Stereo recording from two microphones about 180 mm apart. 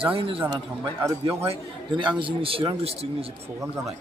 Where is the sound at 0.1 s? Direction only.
30° right (ahead or behind).